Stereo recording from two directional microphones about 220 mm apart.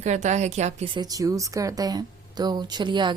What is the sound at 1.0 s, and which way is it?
A woman's voice, 15° right (ahead or behind).